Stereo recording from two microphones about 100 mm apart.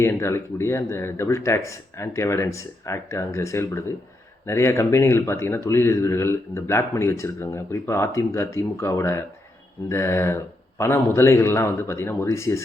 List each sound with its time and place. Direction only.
0.0 s speech: 25° left (ahead or behind)